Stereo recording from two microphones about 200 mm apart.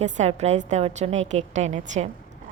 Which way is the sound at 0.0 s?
35° right (ahead or behind).